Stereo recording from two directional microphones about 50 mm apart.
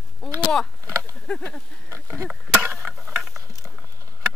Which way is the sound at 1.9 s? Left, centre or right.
Right.